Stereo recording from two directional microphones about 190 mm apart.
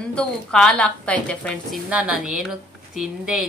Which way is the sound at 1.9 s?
5° right (ahead or behind).